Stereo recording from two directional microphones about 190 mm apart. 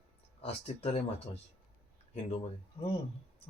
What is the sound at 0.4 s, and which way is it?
Speech, 35° left (ahead or behind).